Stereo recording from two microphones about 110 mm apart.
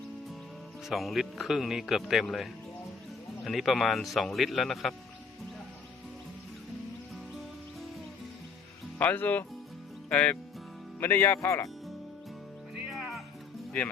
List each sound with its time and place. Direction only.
0.9 s speech: centre (ahead or behind)
9.0 s speech: 15° left (ahead or behind)
11.0 s speech: 20° left (ahead or behind)
12.9 s music: centre (ahead or behind)